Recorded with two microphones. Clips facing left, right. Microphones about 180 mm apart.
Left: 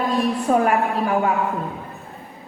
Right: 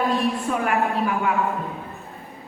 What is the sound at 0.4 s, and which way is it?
Speech, 40° left (ahead or behind).